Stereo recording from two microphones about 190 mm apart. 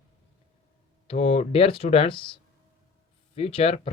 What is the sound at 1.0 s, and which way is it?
Speech, 30° left (ahead or behind).